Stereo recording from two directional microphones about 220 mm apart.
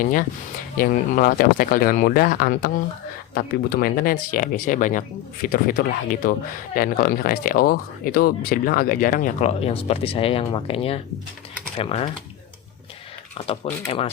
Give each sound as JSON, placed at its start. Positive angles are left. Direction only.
{"t": 0.0, "sound": "speech", "side_deg": 40}
{"t": 13.3, "sound": "speech", "side_deg": 30}